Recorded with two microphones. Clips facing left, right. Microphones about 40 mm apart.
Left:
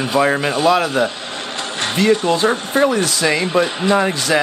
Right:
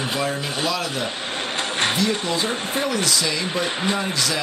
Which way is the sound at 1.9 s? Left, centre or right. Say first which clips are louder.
Left 7 dB; left.